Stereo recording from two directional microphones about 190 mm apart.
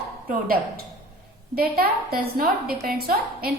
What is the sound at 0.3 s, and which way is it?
A woman's voice, 50° right (ahead or behind).